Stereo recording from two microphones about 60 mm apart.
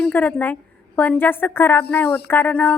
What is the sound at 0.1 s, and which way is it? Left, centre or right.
A woman's voice, left.